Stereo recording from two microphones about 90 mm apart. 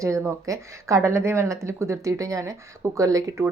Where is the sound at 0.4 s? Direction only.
35° right (ahead or behind).